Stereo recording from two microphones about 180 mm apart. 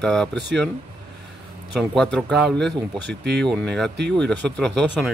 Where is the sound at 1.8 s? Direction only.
5° left (ahead or behind).